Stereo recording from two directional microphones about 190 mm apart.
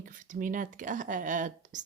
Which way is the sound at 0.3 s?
45° right (ahead or behind).